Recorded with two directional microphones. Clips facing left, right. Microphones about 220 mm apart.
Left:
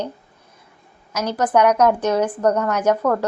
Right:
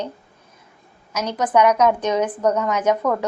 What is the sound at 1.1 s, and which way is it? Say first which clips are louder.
A woman's voice: left 1 dB; 10° left (ahead or behind).